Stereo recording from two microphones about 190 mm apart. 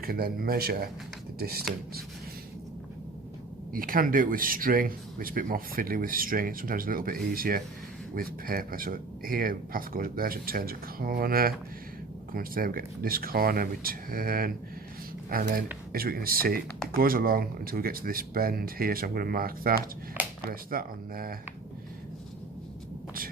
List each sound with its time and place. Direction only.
0.0 s speech: 50° right (ahead or behind)
3.7 s speech: 45° right (ahead or behind)
20.2 s a sound: 10° right (ahead or behind)
20.5 s speech: 50° right (ahead or behind)